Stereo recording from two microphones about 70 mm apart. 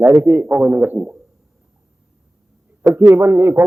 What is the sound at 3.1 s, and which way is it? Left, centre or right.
Speech, right.